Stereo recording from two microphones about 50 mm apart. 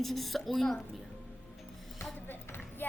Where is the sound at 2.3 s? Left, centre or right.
Left.